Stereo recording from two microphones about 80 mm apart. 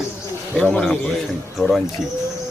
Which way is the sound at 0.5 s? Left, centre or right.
Centre.